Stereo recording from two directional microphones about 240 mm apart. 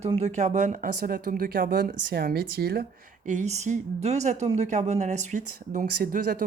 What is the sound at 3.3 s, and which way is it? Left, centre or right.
Speech, right.